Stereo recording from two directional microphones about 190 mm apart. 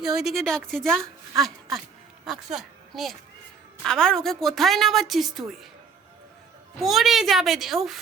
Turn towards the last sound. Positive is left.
turn(degrees=0)  # may be behind; listen again after turning